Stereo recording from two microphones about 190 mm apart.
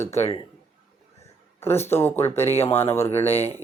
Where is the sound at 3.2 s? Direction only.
30° left (ahead or behind).